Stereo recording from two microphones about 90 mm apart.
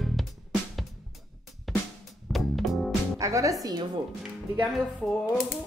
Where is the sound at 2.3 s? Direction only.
Centre (ahead or behind).